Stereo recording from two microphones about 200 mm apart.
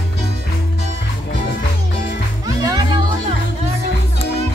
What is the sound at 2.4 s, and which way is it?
Music, 20° right (ahead or behind).